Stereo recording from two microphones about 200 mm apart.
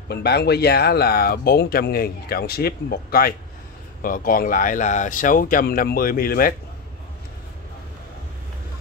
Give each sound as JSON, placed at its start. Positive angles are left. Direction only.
{"t": 0.1, "sound": "speech", "side_deg": 55}